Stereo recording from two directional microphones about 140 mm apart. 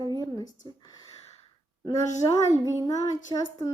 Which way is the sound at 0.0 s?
30° left (ahead or behind).